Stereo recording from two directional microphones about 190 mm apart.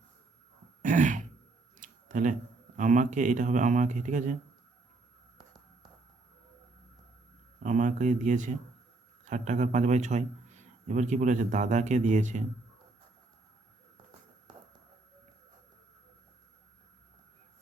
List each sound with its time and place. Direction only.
0.8 s throat clearing: 40° right (ahead or behind)
1.8 s a sound: 40° right (ahead or behind)
2.7 s a man's voice: 40° right (ahead or behind)
7.6 s a man's voice: 40° right (ahead or behind)